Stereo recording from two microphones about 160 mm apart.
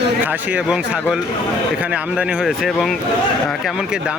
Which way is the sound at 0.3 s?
10° right (ahead or behind).